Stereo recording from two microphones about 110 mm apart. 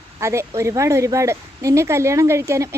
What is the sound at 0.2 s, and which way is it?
A woman's voice, 25° right (ahead or behind).